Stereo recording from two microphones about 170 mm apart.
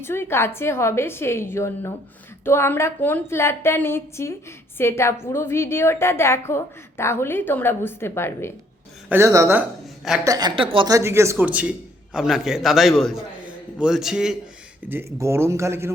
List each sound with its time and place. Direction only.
0.0 s a woman's voice: 15° left (ahead or behind)
9.0 s a woman's voice: 15° right (ahead or behind); by 10.9 s 30° right (ahead or behind)
10.9 s a man's voice: 15° right (ahead or behind)
14.8 s speech: 15° right (ahead or behind)